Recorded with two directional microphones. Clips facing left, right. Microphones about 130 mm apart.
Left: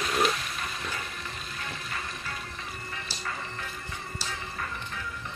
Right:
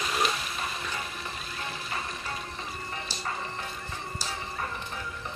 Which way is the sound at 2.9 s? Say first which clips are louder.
Right 2 dB; 30° right (ahead or behind).